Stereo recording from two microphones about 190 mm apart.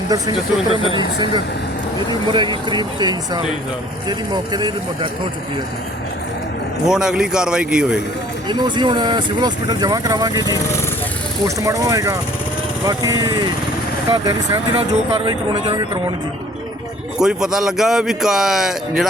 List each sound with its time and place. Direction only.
0.9 s speech: 25° right (ahead or behind)
6.8 s a man's voice: 5° right (ahead or behind)
8.4 s speech: 25° right (ahead or behind)
17.2 s a man's voice: 5° right (ahead or behind)